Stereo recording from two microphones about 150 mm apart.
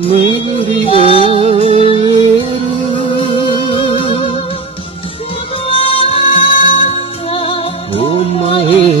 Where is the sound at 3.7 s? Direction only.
35° left (ahead or behind).